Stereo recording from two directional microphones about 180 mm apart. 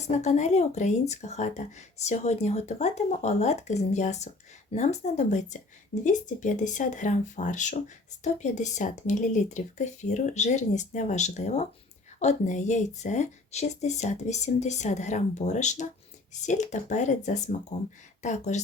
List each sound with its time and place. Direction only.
0.0 s speech: 40° left (ahead or behind)